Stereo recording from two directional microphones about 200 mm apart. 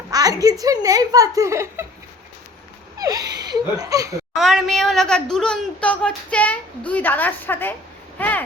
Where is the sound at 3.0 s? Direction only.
20° right (ahead or behind).